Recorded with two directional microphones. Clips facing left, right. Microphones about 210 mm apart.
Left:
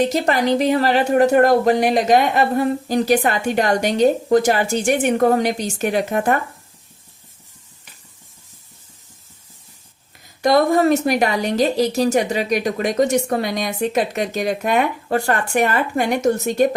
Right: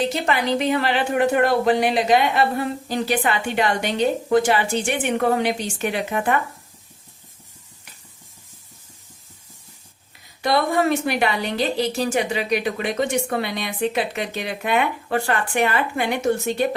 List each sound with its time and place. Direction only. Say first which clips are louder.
0.0 s a woman's voice: left 4 dB; 40° left (ahead or behind)
10.4 s a woman's voice: left 5 dB; 40° left (ahead or behind)